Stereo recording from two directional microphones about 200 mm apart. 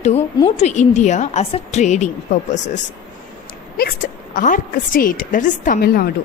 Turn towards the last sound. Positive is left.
turn(degrees=50)  # may be behind; listen again after turning